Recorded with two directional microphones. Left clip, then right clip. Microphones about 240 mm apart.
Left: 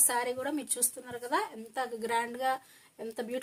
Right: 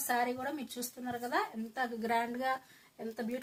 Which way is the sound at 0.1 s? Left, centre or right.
Left.